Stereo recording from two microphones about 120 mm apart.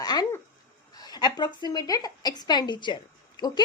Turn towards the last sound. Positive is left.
turn(degrees=35)  # may be behind; listen again after turning